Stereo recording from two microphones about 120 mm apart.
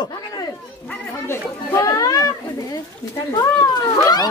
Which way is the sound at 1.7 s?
30° left (ahead or behind).